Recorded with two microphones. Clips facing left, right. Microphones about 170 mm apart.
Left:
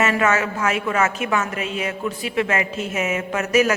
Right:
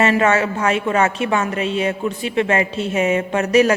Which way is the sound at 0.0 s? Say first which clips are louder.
Right 4 dB; 30° right (ahead or behind).